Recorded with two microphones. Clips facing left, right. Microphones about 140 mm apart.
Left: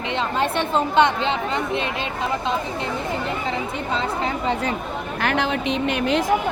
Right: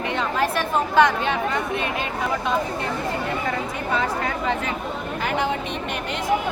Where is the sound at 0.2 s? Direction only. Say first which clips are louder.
Left 2 dB; 25° left (ahead or behind).